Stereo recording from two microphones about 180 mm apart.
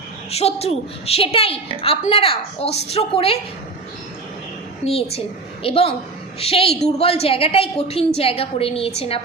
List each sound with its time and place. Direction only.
0.3 s a woman's voice: 35° left (ahead or behind)
5.6 s a woman's voice: 30° left (ahead or behind)